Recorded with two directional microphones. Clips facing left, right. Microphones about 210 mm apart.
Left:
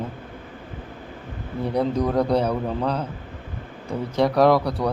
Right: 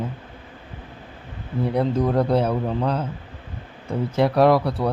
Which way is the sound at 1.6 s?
5° right (ahead or behind).